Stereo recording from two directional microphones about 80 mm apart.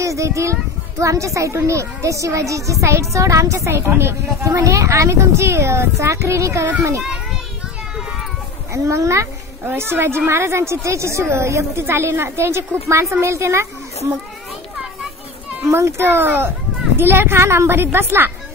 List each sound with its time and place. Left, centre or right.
0.0 s a child's voice: right
8.7 s a child's voice: right
15.6 s a child's voice: right